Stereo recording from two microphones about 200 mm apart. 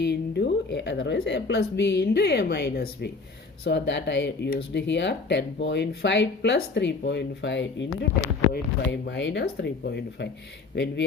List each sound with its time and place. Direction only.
0.0 s speech: 55° left (ahead or behind); by 8.3 s 75° left (ahead or behind)
8.5 s speech: 60° left (ahead or behind)